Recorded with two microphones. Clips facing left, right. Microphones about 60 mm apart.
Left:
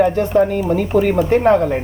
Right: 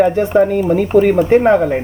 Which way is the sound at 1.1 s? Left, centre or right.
Right.